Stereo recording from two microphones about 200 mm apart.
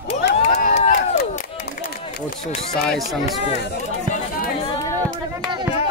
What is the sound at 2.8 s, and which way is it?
Speech, centre (ahead or behind).